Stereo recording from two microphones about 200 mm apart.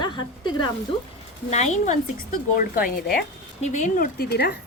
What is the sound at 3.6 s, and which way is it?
Speech, 35° left (ahead or behind).